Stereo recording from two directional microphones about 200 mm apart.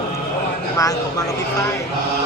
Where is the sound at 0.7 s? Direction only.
15° left (ahead or behind).